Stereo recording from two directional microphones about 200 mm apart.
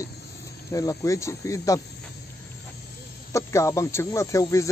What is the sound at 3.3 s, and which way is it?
Speech, 15° left (ahead or behind).